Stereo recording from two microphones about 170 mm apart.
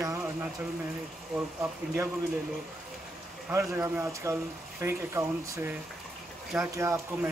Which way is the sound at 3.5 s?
15° right (ahead or behind).